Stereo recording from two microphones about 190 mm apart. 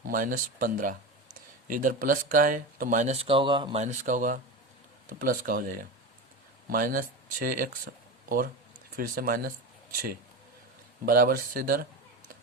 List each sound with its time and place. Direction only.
0.1 s speech: 45° right (ahead or behind)
9.0 s speech: 50° right (ahead or behind)
11.0 s speech: 50° right (ahead or behind)